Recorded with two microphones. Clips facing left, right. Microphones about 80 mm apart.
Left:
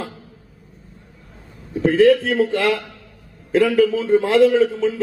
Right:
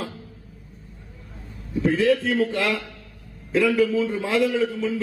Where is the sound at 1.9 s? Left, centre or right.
Left.